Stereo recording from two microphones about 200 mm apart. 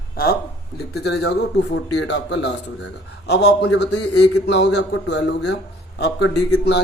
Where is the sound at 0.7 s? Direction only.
55° left (ahead or behind).